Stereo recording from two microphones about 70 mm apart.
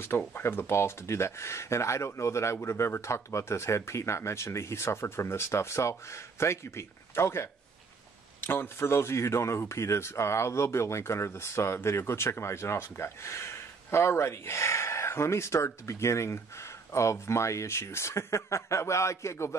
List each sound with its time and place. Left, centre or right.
0.3 s a man's voice: left